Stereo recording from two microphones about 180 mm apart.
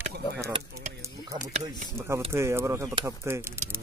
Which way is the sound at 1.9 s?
15° right (ahead or behind).